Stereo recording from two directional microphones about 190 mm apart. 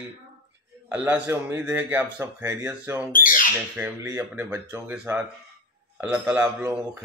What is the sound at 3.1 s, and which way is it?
Speech, 45° left (ahead or behind).